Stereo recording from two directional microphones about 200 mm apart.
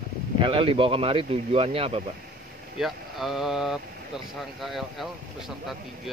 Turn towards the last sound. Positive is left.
turn(degrees=0)  # may be behind; listen again after turning